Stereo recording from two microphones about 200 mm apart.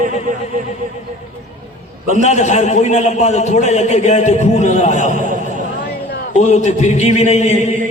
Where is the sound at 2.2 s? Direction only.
35° left (ahead or behind).